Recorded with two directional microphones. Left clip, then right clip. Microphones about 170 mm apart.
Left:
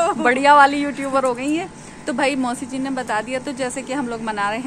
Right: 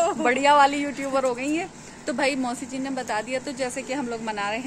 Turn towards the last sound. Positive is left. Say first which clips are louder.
# left 5 dB
turn(degrees=0)  # may be behind; listen again after turning